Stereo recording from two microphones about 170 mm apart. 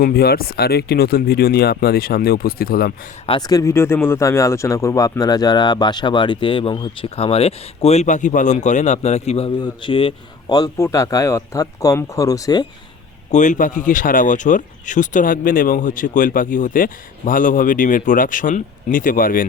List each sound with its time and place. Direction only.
0.0 s speech: 65° left (ahead or behind)
3.2 s speech: 25° left (ahead or behind)
13.3 s speech: 45° left (ahead or behind)